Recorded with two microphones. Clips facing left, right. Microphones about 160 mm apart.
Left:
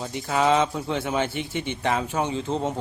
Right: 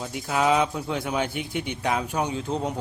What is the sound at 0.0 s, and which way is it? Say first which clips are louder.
Speech: left 1 dB; 5° right (ahead or behind).